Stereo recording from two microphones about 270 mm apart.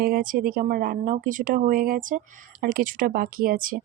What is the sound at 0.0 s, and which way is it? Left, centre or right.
Speech, right.